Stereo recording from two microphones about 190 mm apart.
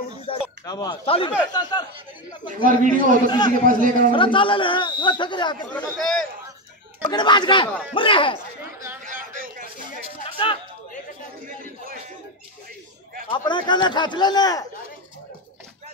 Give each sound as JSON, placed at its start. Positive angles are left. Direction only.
{"t": 0.7, "sound": "a man's voice", "side_deg": 20}
{"t": 2.6, "sound": "a man's voice", "side_deg": -45}
{"t": 3.3, "sound": "a man's voice", "side_deg": 25}
{"t": 3.6, "sound": "a man's voice", "side_deg": -45}
{"t": 4.1, "sound": "a man's voice", "side_deg": 25}
{"t": 5.7, "sound": "speech", "side_deg": 5}
{"t": 7.0, "sound": "a man's voice", "side_deg": 25}
{"t": 8.7, "sound": "chatter", "side_deg": -15}
{"t": 9.0, "sound": "a sound", "side_deg": -45}
{"t": 10.2, "sound": "music", "side_deg": 25}
{"t": 11.4, "sound": "a sound", "side_deg": -45}
{"t": 13.4, "sound": "a man's voice", "side_deg": 25}